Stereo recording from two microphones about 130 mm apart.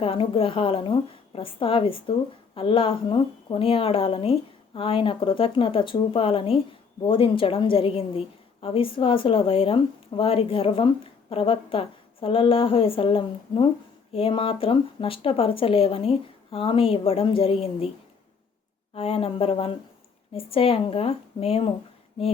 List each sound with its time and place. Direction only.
0.0 s a woman's voice: 45° left (ahead or behind)
18.9 s a woman's voice: 50° left (ahead or behind)